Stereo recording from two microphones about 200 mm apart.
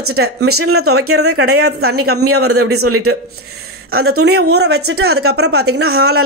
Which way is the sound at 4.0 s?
55° right (ahead or behind).